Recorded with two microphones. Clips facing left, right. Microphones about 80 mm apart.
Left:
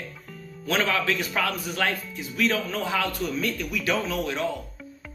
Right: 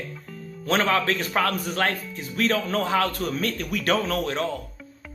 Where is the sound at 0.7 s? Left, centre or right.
Right.